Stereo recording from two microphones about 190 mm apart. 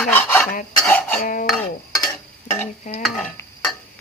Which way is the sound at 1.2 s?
45° left (ahead or behind).